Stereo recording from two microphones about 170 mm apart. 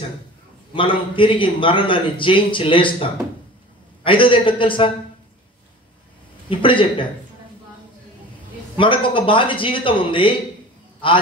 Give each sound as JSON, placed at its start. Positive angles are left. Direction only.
{"t": 0.7, "sound": "a man's voice", "side_deg": 30}
{"t": 6.5, "sound": "a man's voice", "side_deg": 30}
{"t": 8.7, "sound": "a man's voice", "side_deg": 30}